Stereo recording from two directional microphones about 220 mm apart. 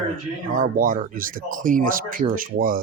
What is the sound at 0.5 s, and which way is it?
Speech, 40° right (ahead or behind).